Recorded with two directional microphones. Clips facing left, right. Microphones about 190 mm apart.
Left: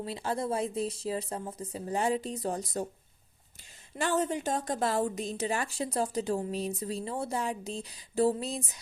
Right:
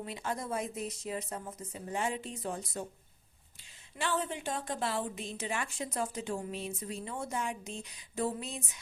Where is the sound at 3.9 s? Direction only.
45° left (ahead or behind).